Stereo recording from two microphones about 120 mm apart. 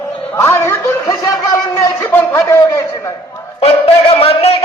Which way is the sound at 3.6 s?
50° left (ahead or behind).